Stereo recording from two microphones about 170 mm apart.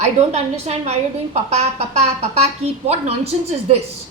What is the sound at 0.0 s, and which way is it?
A woman's voice, 40° right (ahead or behind).